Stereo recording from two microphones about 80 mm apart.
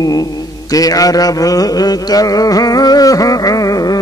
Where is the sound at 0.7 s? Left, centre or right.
Left.